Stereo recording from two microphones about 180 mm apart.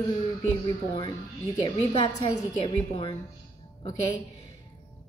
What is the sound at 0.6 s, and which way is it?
Speech, 25° left (ahead or behind).